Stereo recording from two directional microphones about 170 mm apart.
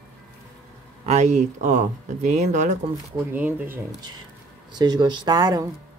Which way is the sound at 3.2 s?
10° right (ahead or behind).